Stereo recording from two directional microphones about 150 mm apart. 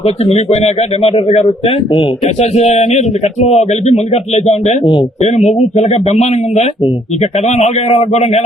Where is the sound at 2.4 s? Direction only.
50° left (ahead or behind).